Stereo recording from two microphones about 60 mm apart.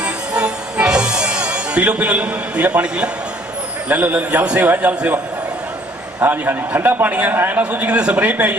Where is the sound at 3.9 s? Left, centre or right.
Right.